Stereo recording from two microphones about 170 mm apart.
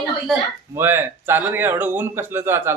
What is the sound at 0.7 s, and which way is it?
Speech, 15° right (ahead or behind).